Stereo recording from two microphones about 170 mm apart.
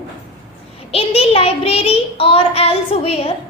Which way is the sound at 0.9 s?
35° left (ahead or behind).